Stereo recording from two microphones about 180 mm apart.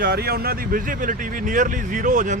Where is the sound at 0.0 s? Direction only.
60° right (ahead or behind).